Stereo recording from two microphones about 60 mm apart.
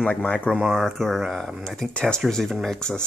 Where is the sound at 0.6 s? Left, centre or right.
Centre.